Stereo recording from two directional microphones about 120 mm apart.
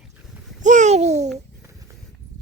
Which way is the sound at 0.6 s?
90° right.